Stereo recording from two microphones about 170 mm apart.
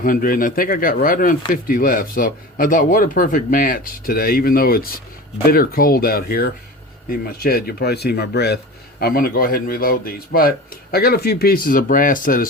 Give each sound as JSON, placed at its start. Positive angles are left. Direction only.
{"t": 0.0, "sound": "speech", "side_deg": 55}
{"t": 9.0, "sound": "speech", "side_deg": 60}